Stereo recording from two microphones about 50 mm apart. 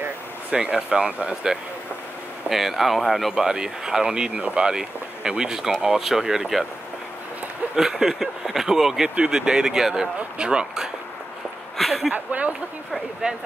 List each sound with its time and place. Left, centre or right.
0.5 s speech: centre
3.4 s speech: centre
7.7 s speech: centre
11.7 s a sound: centre
12.1 s speech: right
13.2 s speech: centre